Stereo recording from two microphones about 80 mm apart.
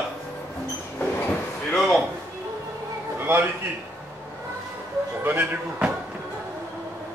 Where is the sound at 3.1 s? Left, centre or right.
Right.